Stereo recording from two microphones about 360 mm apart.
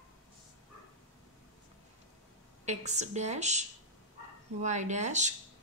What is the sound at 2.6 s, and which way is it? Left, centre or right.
A woman's voice, centre.